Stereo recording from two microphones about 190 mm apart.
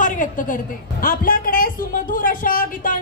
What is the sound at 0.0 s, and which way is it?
A woman's voice, 45° left (ahead or behind).